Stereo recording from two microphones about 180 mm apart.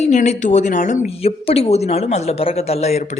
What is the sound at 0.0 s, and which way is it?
Speech, 40° left (ahead or behind).